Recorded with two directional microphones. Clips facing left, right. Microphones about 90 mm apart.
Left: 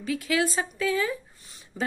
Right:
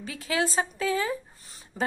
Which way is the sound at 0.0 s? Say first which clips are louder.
Left 3 dB; 35° right (ahead or behind).